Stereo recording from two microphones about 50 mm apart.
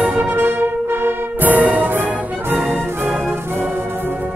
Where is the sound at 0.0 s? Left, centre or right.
Right.